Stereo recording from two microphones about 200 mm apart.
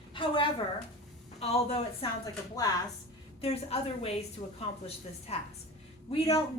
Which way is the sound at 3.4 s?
30° left (ahead or behind).